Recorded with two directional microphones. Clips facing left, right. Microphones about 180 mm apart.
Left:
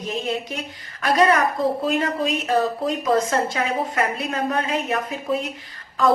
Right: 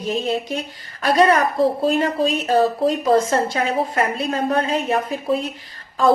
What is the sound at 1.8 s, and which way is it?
A woman's voice, 30° right (ahead or behind).